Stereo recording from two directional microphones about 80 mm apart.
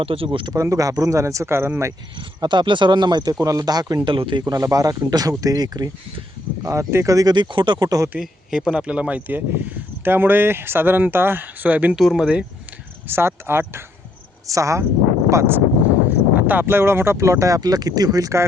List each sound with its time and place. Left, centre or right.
0.3 s speech: right
0.5 s speech: right
2.1 s speech: right
3.4 s speech: right
4.0 s speech: right
4.4 s speech: right
6.7 s speech: right
7.3 s speech: right
8.2 s speech: centre
11.9 s speech: centre
13.1 s speech: right
14.4 s speech: right